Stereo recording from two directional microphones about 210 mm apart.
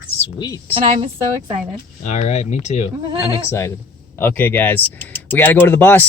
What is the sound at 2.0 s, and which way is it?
Speech, 30° left (ahead or behind).